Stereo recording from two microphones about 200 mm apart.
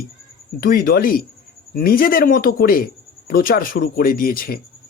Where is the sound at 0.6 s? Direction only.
45° left (ahead or behind).